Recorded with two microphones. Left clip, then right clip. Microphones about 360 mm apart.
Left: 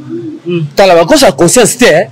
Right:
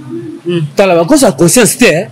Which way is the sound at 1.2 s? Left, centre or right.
Left.